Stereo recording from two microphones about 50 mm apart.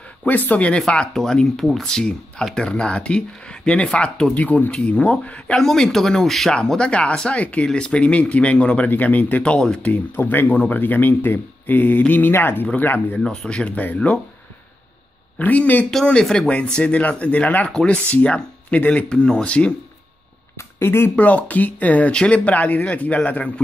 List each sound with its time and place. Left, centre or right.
0.2 s speech: left
0.7 s speech: centre
5.6 s speech: centre; by 9.4 s left
9.4 s speech: centre
10.1 s speech: left
13.5 s speech: left
15.3 s speech: left
16.1 s speech: centre
20.8 s speech: left
21.2 s speech: left